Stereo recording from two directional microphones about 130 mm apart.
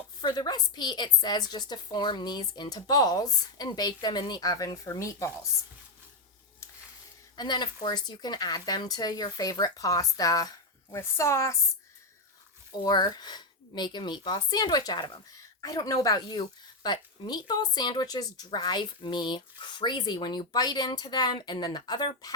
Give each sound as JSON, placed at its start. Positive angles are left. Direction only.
{"t": 0.2, "sound": "speech", "side_deg": 35}
{"t": 7.3, "sound": "speech", "side_deg": 35}
{"t": 12.8, "sound": "speech", "side_deg": 30}